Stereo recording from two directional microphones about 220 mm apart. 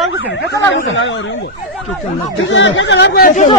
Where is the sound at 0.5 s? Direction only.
55° left (ahead or behind).